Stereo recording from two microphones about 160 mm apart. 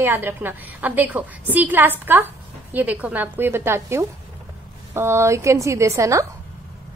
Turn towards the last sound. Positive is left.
turn(degrees=-20)  # may be behind; listen again after turning